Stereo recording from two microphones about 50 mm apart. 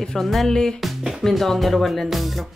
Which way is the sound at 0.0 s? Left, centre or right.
Centre.